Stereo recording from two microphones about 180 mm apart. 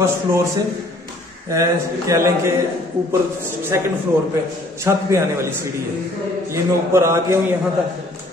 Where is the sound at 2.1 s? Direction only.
15° right (ahead or behind).